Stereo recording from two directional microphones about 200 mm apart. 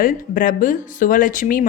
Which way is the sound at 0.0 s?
45° left (ahead or behind).